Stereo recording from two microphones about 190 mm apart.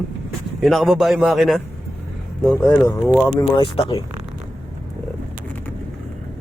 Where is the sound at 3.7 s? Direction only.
30° left (ahead or behind).